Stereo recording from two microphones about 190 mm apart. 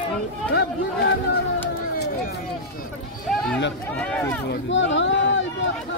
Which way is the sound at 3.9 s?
5° left (ahead or behind).